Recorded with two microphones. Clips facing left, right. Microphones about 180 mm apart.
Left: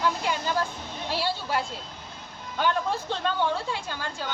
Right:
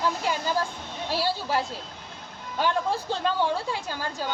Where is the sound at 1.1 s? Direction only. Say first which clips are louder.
Right 2 dB; 40° right (ahead or behind).